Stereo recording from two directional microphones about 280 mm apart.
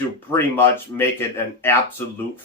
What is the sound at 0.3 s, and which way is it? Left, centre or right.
Speech, centre.